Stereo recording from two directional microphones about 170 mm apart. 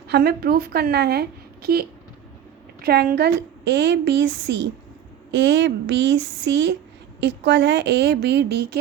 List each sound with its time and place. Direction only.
0.1 s a woman's voice: 65° right (ahead or behind); by 8.8 s 80° right